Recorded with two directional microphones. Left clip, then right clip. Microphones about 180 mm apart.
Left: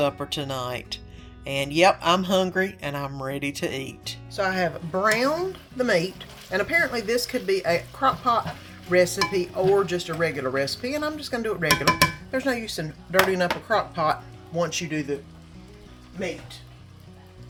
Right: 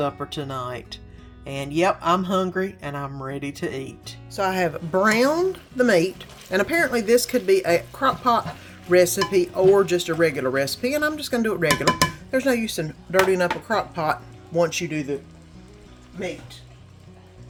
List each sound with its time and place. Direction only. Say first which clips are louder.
0.0 s speech: left 1 dB; centre (ahead or behind)
4.3 s speech: right 2 dB; 35° right (ahead or behind)
4.9 s speech: right 4 dB; 60° right (ahead or behind)
13.1 s speech: right 2 dB; 40° right (ahead or behind)